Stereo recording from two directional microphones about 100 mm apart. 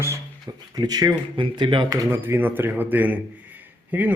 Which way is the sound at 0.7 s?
40° right (ahead or behind).